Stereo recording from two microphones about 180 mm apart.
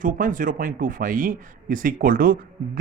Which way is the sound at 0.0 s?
45° right (ahead or behind).